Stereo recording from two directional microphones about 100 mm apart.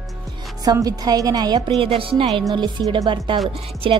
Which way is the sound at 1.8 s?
65° right (ahead or behind).